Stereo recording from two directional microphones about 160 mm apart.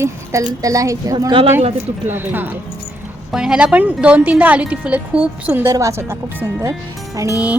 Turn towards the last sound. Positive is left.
turn(degrees=-20)  # may be behind; listen again after turning